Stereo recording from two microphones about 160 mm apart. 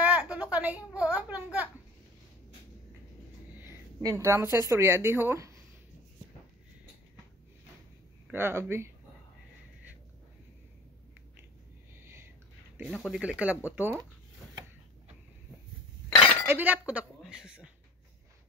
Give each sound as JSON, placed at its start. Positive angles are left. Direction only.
{"t": 0.0, "sound": "a woman's voice", "side_deg": -10}
{"t": 3.5, "sound": "a woman's voice", "side_deg": -15}
{"t": 8.3, "sound": "speech", "side_deg": -15}
{"t": 12.0, "sound": "a sound", "side_deg": -15}
{"t": 12.7, "sound": "speech", "side_deg": -5}
{"t": 16.4, "sound": "speech", "side_deg": -10}